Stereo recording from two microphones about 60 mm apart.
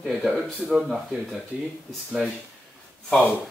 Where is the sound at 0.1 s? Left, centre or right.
Centre.